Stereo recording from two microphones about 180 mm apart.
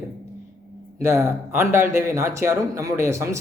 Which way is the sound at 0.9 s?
15° right (ahead or behind).